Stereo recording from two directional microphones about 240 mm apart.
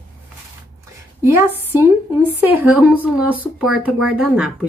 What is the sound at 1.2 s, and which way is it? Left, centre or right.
A woman's voice, centre.